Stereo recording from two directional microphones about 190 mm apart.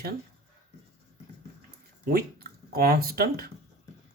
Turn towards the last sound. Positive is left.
turn(degrees=-50)  # may be behind; listen again after turning